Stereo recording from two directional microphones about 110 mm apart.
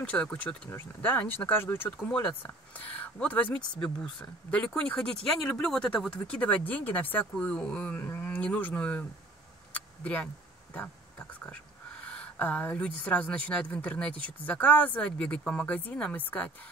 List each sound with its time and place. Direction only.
0.0 s a woman's voice: 10° left (ahead or behind)
9.7 s a sound: 15° left (ahead or behind)
12.0 s a woman's voice: 10° left (ahead or behind)